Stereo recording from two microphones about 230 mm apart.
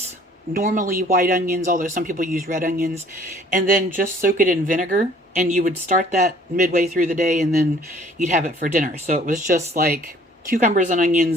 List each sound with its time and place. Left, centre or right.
0.5 s speech: right